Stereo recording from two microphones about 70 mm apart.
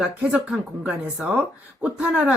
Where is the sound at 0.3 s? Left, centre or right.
Centre.